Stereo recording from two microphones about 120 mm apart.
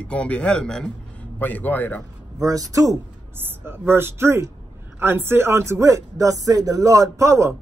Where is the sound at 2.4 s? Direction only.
30° right (ahead or behind).